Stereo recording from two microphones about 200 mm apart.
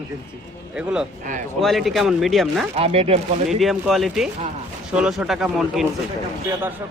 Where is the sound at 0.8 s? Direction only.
5° right (ahead or behind).